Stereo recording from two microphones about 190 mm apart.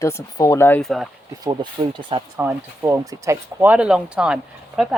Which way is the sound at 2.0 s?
25° right (ahead or behind).